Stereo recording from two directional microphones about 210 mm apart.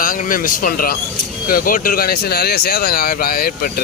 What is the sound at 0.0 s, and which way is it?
Speech, 40° left (ahead or behind).